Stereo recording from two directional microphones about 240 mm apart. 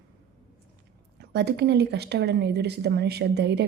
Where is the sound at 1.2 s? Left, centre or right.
Right.